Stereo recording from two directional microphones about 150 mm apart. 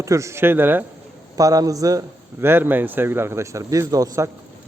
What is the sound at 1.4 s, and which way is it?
A man's voice, 25° right (ahead or behind).